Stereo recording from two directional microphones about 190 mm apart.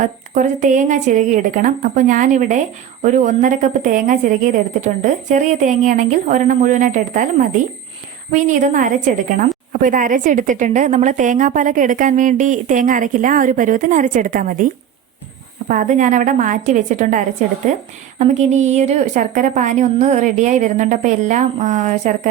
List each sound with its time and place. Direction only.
0.0 s a woman's voice: 40° right (ahead or behind)